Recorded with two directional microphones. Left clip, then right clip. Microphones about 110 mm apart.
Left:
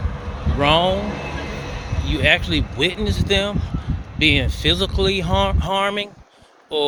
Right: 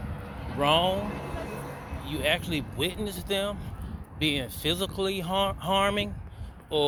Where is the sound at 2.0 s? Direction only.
35° left (ahead or behind).